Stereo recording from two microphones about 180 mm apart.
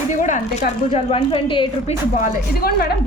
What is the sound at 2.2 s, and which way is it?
Speech, 55° left (ahead or behind).